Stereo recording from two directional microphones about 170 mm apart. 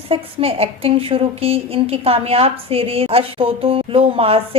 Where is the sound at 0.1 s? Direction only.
35° right (ahead or behind).